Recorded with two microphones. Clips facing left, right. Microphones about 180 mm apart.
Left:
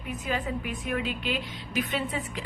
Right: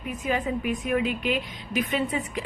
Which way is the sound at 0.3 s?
15° right (ahead or behind).